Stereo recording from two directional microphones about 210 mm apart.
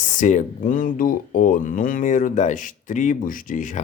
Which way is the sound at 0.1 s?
35° left (ahead or behind).